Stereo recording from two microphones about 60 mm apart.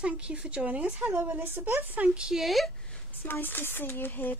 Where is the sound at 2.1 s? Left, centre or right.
Centre.